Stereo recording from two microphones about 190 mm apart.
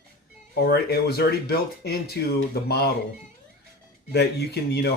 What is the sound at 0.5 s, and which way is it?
Speech, 55° left (ahead or behind).